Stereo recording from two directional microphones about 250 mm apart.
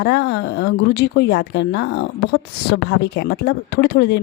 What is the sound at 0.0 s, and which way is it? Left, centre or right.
Speech, left.